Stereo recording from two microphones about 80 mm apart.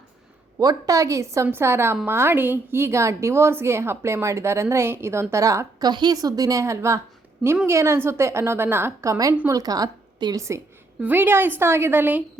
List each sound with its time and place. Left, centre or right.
0.6 s a woman's voice: right
5.9 s a woman's voice: right
9.0 s a woman's voice: right
10.3 s a woman's voice: right
11.0 s a woman's voice: right